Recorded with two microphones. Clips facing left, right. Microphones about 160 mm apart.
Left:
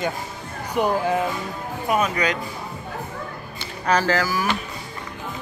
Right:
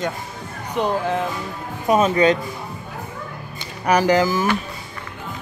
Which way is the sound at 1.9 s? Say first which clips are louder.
Right 6 dB; 25° right (ahead or behind).